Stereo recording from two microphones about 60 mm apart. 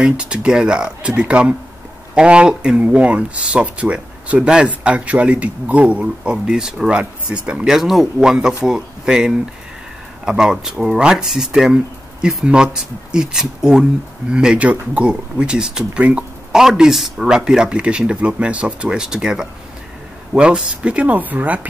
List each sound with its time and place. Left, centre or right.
0.0 s speech: centre
16.5 s speech: centre; by 21.5 s right